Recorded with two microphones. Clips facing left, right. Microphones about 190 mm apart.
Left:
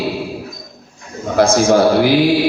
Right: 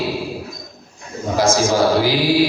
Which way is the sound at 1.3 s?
60° left (ahead or behind).